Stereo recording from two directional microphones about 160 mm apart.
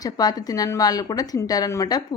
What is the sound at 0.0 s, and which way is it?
A woman's voice, 25° left (ahead or behind).